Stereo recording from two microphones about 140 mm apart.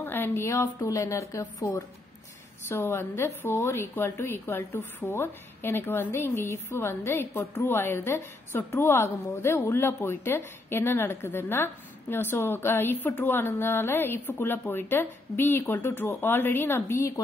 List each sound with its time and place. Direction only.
0.0 s a woman's voice: 15° left (ahead or behind)